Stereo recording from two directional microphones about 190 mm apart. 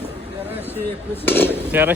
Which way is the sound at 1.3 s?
10° left (ahead or behind).